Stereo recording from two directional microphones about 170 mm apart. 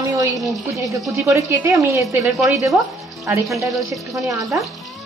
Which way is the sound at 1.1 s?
15° right (ahead or behind).